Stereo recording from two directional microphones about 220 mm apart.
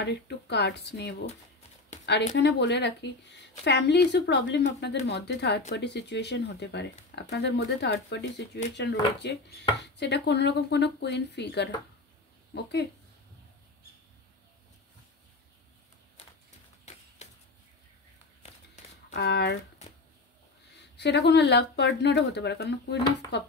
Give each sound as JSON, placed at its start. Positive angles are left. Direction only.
{"t": 0.0, "sound": "speech", "side_deg": 50}
{"t": 19.1, "sound": "speech", "side_deg": 50}
{"t": 20.9, "sound": "speech", "side_deg": 50}